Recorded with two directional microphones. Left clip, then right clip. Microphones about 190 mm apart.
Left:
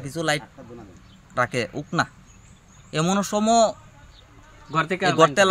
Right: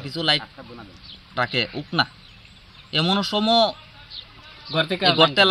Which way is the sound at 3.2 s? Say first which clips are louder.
Left 2 dB; 15° left (ahead or behind).